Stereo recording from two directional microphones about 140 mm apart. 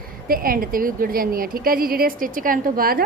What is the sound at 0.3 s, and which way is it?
A woman's voice, 90° right.